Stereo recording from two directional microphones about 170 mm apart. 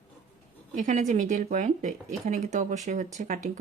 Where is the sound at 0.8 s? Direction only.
45° right (ahead or behind).